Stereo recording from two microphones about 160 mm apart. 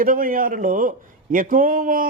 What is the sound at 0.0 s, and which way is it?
A man's voice, 60° right (ahead or behind).